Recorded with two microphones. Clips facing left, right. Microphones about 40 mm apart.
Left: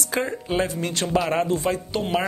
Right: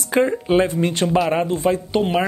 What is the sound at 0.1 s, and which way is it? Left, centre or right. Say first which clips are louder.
Speech: right 8 dB; right.